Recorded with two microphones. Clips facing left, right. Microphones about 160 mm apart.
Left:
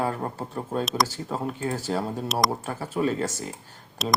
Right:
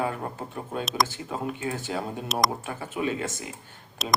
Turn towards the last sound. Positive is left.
turn(degrees=0)  # may be behind; listen again after turning